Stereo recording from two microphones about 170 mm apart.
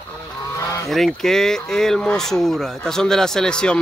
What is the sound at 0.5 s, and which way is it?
Goose, 20° left (ahead or behind).